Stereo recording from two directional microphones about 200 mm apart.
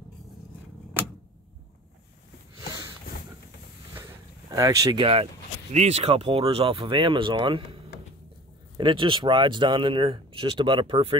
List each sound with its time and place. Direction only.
3.9 s speech: 15° right (ahead or behind)